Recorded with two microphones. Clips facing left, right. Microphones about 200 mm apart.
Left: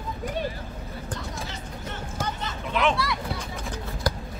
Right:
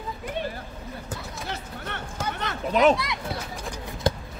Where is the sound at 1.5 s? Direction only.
65° right (ahead or behind).